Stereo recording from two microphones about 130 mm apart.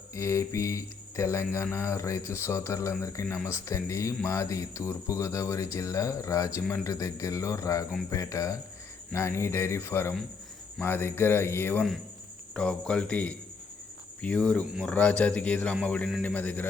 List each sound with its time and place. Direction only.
0.1 s speech: 20° left (ahead or behind)
12.5 s a man's voice: 5° left (ahead or behind)